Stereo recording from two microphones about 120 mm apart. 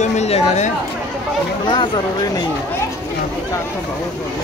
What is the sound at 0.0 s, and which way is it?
Speech, 70° left (ahead or behind).